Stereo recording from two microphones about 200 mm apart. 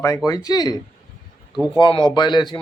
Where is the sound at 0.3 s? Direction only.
20° left (ahead or behind).